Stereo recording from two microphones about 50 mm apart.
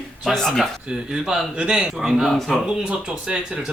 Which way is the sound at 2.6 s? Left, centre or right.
Centre.